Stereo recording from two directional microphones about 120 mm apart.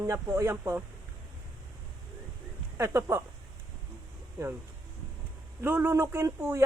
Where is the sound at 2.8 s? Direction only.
25° right (ahead or behind).